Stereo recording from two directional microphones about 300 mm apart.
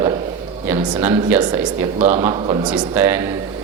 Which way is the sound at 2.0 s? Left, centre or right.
Right.